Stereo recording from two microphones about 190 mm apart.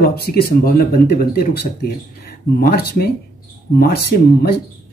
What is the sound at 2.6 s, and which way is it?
Speech, 55° left (ahead or behind).